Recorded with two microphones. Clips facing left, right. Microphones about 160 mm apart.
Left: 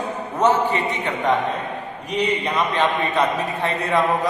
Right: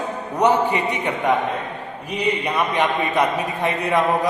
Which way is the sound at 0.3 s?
15° right (ahead or behind).